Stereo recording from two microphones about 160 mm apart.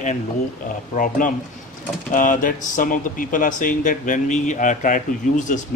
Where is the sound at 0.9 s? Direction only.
55° left (ahead or behind).